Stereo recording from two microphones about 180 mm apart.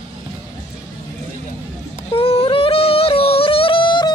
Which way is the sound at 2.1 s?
30° left (ahead or behind).